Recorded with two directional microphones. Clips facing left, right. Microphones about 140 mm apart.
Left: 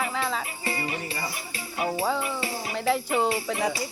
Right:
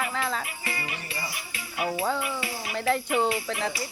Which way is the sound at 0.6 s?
35° left (ahead or behind).